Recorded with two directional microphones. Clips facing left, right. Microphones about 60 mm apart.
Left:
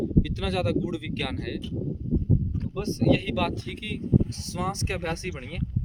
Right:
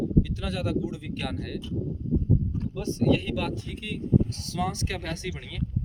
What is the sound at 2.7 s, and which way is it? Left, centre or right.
Speech, left.